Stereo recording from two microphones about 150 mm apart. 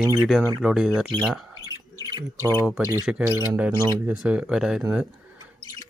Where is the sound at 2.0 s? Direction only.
25° right (ahead or behind).